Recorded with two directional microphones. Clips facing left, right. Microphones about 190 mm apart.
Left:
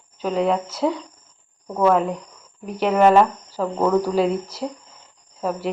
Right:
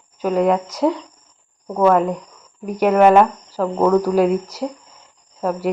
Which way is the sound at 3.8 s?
5° left (ahead or behind).